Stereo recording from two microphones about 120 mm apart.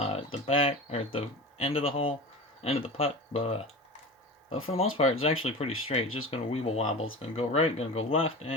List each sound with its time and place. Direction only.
0.0 s speech: 55° left (ahead or behind)